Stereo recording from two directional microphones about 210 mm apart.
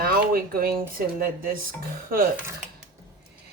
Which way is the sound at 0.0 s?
45° right (ahead or behind).